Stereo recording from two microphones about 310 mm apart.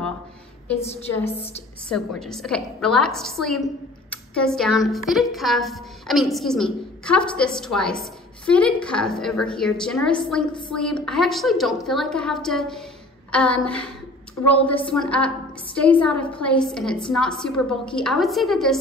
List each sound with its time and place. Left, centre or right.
0.7 s a woman's voice: centre
1.0 s a woman's voice: centre